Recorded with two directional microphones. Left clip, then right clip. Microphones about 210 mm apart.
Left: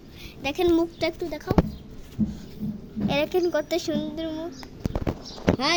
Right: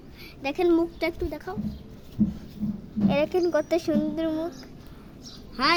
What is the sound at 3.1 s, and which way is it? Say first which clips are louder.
Speech: even; 5° right (ahead or behind).